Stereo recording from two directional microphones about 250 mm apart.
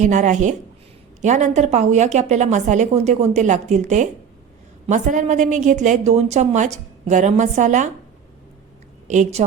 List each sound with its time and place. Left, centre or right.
0.0 s a woman's voice: right
9.0 s a woman's voice: right